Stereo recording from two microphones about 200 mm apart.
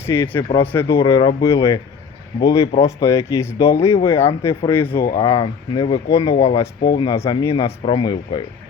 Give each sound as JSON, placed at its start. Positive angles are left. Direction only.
{"t": 0.0, "sound": "speech", "side_deg": 10}